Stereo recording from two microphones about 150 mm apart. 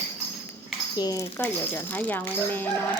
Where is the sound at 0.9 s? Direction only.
25° left (ahead or behind).